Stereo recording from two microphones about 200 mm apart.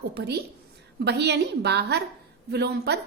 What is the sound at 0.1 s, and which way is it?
A woman's voice, 55° right (ahead or behind).